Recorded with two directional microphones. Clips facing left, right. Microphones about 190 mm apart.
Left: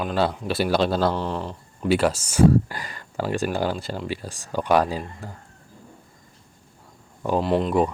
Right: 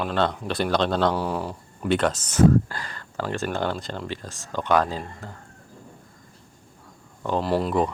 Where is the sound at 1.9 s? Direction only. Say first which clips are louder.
Left 2 dB; 5° left (ahead or behind).